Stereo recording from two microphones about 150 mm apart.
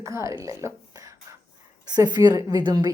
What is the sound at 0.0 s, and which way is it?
A woman's voice, 20° right (ahead or behind).